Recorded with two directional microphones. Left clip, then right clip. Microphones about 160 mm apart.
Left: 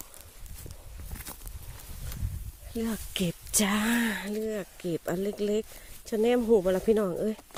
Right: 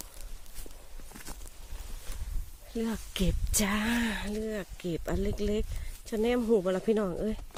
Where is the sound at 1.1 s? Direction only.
40° left (ahead or behind).